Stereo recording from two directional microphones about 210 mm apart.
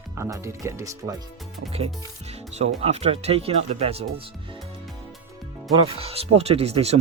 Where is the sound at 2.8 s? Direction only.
30° right (ahead or behind).